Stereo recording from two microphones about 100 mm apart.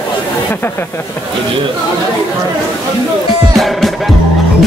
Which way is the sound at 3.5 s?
Centre (ahead or behind).